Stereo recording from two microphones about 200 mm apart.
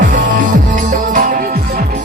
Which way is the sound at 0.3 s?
40° right (ahead or behind).